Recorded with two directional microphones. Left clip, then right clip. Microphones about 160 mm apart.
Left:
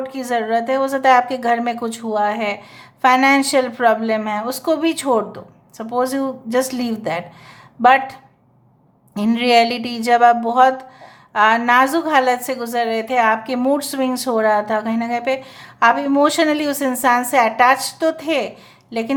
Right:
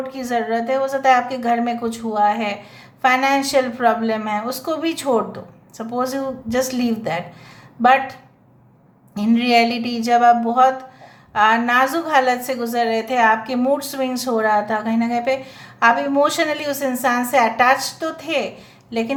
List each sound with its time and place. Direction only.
0.1 s a woman's voice: 35° left (ahead or behind)
9.1 s a woman's voice: 40° left (ahead or behind)